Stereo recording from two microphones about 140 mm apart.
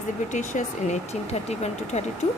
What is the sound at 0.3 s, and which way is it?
Speech, 60° left (ahead or behind).